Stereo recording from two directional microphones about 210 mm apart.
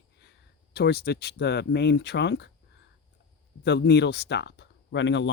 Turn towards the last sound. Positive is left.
turn(degrees=60)  # may be behind; listen again after turning